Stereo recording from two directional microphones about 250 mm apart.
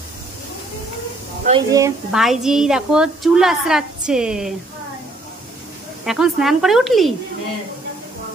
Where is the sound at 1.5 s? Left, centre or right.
Right.